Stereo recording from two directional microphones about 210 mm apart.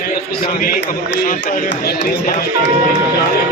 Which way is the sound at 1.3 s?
40° left (ahead or behind).